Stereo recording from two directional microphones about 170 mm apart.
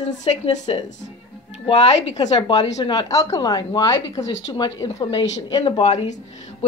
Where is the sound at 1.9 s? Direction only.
40° left (ahead or behind).